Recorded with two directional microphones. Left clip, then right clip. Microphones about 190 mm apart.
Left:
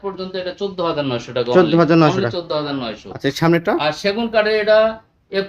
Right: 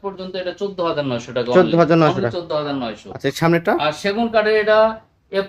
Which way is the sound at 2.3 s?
15° left (ahead or behind).